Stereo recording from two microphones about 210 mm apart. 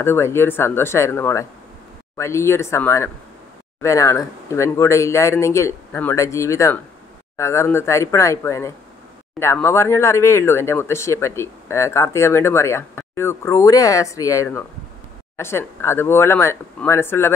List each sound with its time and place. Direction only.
0.0 s speech: 10° left (ahead or behind)